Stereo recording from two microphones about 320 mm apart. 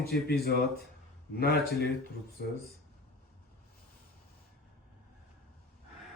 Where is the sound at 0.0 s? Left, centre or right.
Left.